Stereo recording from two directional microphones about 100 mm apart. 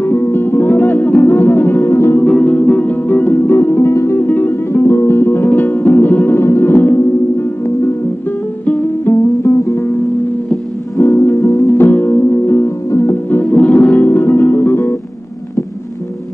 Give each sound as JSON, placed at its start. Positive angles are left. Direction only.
{"t": 0.0, "sound": "music", "side_deg": 20}
{"t": 9.4, "sound": "music", "side_deg": 25}
{"t": 11.0, "sound": "music", "side_deg": 25}